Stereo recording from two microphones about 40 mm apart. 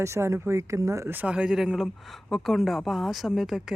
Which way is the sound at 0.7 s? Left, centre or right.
Centre.